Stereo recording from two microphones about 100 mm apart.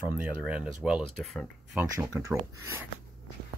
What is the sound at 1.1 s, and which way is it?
Speech, 5° left (ahead or behind).